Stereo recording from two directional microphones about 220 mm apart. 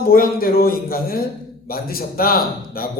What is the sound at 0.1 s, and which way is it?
A man's voice, 40° left (ahead or behind).